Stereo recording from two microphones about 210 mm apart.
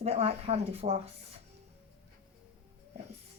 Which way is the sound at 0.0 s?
30° right (ahead or behind).